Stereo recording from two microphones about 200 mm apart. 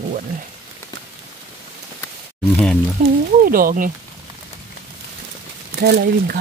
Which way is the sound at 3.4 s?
45° right (ahead or behind).